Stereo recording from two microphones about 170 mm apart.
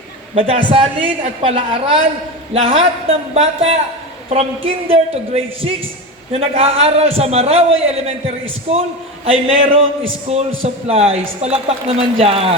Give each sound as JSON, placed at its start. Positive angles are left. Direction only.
{"t": 0.3, "sound": "a man's voice", "side_deg": -35}
{"t": 9.2, "sound": "a man's voice", "side_deg": -35}